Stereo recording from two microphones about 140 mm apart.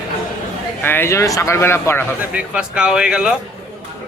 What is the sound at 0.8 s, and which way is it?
Speech, 15° left (ahead or behind).